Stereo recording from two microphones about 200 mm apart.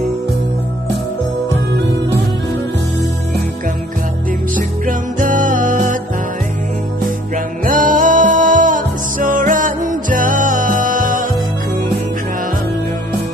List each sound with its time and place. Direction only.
4.6 s music: 40° right (ahead or behind)
7.7 s music: 40° right (ahead or behind)